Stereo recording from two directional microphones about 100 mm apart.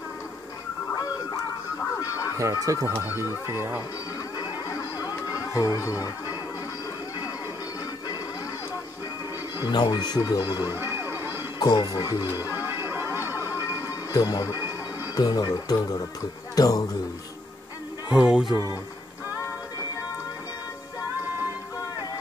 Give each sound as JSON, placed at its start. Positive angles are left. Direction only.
{"t": 0.9, "sound": "music", "side_deg": 35}
{"t": 2.3, "sound": "speech", "side_deg": -35}
{"t": 4.4, "sound": "a sound", "side_deg": 35}
{"t": 9.7, "sound": "speech", "side_deg": 45}
{"t": 10.6, "sound": "music", "side_deg": -20}
{"t": 11.6, "sound": "speech", "side_deg": 40}
{"t": 12.4, "sound": "music", "side_deg": -20}
{"t": 13.7, "sound": "music", "side_deg": 35}
{"t": 15.1, "sound": "speech", "side_deg": 40}
{"t": 18.1, "sound": "speech", "side_deg": -10}